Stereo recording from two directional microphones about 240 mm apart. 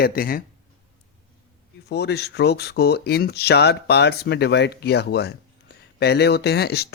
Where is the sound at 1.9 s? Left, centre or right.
Left.